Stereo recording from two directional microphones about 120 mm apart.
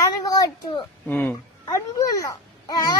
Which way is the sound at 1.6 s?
30° left (ahead or behind).